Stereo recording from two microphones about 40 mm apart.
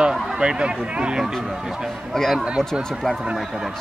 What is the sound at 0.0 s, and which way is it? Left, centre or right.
Speech, right.